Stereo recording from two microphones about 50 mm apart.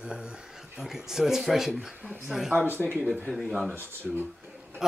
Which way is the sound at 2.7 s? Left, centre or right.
Right.